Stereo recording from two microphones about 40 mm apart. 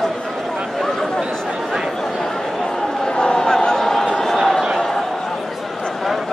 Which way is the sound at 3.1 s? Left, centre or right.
Left.